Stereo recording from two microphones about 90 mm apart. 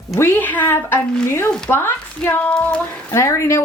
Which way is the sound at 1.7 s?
25° left (ahead or behind).